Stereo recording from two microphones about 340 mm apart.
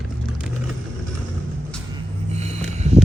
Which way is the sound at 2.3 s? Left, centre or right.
Centre.